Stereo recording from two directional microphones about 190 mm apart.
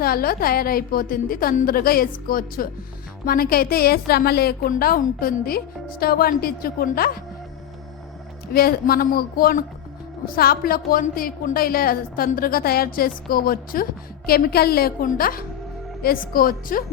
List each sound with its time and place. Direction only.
0.0 s speech: 50° left (ahead or behind)
8.5 s speech: 50° left (ahead or behind)